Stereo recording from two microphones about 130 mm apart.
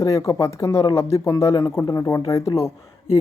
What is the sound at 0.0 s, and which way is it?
Speech, 25° left (ahead or behind).